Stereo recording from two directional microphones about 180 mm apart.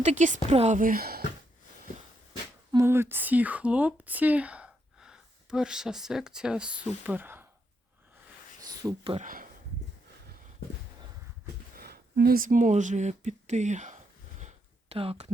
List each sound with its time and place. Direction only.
0.0 s a woman's voice: 40° right (ahead or behind); by 1.2 s 55° right (ahead or behind)
2.7 s speech: 15° right (ahead or behind)
8.8 s speech: 20° right (ahead or behind)
9.1 s speech: 50° right (ahead or behind)
11.8 s a sound: 60° right (ahead or behind); by 15.3 s 30° right (ahead or behind)